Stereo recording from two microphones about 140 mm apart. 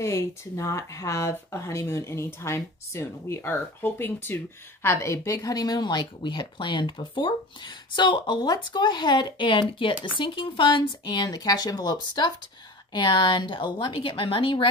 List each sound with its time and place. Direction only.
0.0 s speech: 20° left (ahead or behind); by 14.7 s 35° left (ahead or behind)